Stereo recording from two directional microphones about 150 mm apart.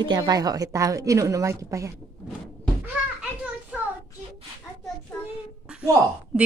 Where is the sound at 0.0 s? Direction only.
30° right (ahead or behind).